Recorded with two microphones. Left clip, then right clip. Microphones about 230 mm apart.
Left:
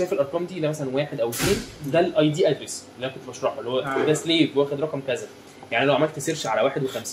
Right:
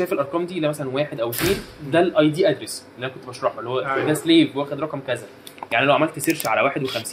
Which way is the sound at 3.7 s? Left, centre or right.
Right.